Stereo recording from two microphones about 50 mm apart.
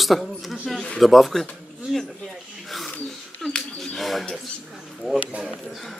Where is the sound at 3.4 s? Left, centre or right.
Centre.